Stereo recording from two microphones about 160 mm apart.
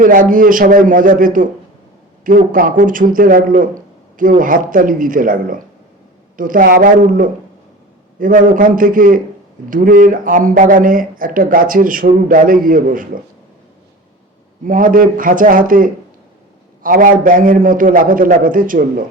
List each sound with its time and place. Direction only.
0.0 s speech: 60° right (ahead or behind)
14.6 s speech: 55° right (ahead or behind)